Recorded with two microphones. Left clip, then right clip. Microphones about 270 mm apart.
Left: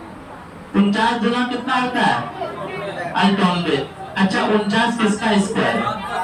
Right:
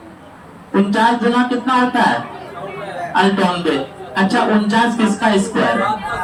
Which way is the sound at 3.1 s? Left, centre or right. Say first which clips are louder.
Right 3 dB; centre.